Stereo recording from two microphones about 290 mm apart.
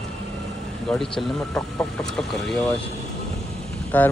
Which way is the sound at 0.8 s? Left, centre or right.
Centre.